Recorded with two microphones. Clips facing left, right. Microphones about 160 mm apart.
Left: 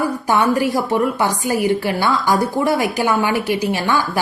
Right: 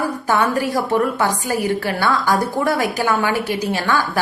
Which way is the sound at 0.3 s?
15° left (ahead or behind).